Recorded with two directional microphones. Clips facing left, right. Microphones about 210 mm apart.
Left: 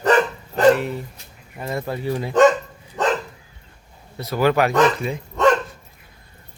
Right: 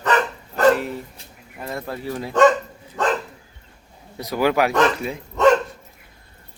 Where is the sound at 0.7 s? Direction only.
Centre (ahead or behind).